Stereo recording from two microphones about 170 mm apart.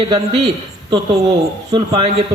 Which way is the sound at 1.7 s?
30° right (ahead or behind).